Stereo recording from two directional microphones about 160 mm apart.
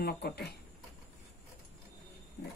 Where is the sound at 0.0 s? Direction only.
90° left.